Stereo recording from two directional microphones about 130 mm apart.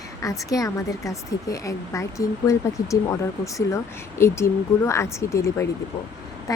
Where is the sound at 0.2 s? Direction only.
25° left (ahead or behind).